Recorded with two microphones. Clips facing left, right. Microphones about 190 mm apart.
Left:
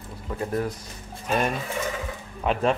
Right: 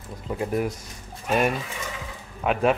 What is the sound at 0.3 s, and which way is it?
Speech, 15° right (ahead or behind).